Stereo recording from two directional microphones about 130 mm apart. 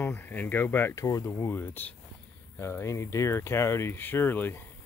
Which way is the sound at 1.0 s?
25° left (ahead or behind).